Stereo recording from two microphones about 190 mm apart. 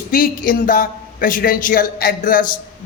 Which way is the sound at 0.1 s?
50° left (ahead or behind).